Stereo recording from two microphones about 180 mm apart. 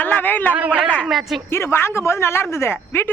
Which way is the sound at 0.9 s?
5° left (ahead or behind).